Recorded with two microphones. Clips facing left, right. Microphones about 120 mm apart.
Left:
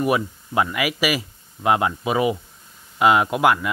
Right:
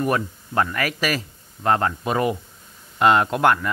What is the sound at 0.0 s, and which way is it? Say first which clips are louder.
Speech: left 2 dB; 10° left (ahead or behind).